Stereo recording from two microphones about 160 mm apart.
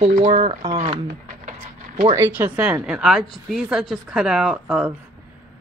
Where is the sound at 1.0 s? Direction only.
55° right (ahead or behind).